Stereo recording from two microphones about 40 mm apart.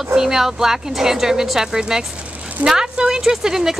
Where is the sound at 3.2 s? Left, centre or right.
Centre.